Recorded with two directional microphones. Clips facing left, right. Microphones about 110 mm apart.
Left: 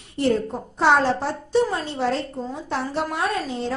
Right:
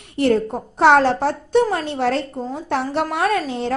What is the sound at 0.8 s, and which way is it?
A woman's voice, 70° right (ahead or behind).